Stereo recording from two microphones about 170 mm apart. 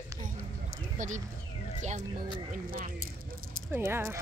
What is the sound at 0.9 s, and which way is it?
Speech, 45° right (ahead or behind).